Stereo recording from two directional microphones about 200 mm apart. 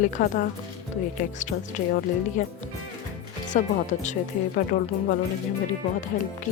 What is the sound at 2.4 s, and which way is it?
Speech, 40° left (ahead or behind).